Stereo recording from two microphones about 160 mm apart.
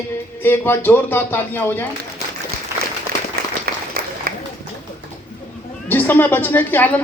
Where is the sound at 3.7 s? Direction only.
75° right (ahead or behind).